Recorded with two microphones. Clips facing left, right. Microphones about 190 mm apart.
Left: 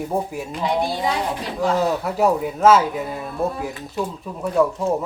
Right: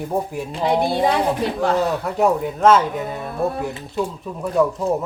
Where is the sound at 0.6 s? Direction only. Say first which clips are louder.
Right 4 dB; 55° right (ahead or behind).